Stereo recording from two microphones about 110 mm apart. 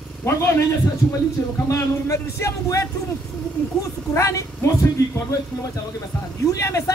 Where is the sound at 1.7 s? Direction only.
25° left (ahead or behind).